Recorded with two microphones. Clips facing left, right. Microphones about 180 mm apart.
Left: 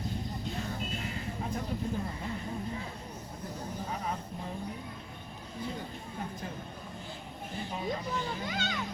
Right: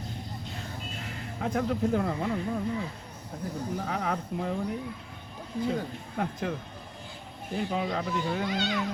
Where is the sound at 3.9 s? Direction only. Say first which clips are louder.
Right 6 dB; 75° right (ahead or behind).